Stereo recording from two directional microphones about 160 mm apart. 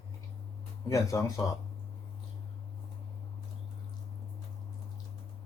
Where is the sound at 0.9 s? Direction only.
20° left (ahead or behind).